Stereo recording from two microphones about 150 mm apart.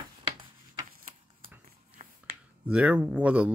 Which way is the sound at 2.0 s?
55° right (ahead or behind).